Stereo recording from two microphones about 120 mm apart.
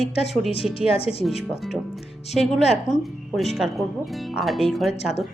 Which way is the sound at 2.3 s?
Centre (ahead or behind).